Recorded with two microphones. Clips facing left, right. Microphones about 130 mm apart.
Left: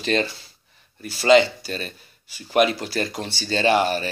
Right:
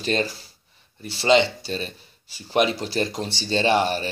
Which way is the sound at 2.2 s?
30° right (ahead or behind).